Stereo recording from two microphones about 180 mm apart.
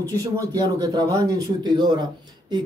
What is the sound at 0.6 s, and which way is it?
Speech, 20° right (ahead or behind).